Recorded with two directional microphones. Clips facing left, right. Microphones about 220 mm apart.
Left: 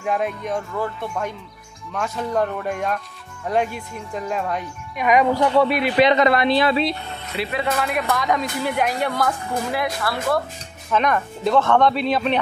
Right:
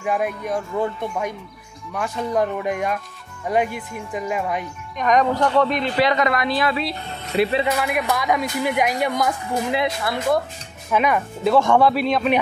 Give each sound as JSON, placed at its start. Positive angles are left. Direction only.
{"t": 0.0, "sound": "speech", "side_deg": -5}
{"t": 0.7, "sound": "speech", "side_deg": -20}
{"t": 2.0, "sound": "speech", "side_deg": 0}
{"t": 2.3, "sound": "speech", "side_deg": -10}
{"t": 4.9, "sound": "speech", "side_deg": 10}
{"t": 7.3, "sound": "speech", "side_deg": -35}
{"t": 7.7, "sound": "speech", "side_deg": -10}